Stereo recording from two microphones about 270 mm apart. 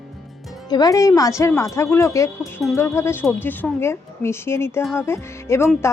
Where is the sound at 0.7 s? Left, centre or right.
Centre.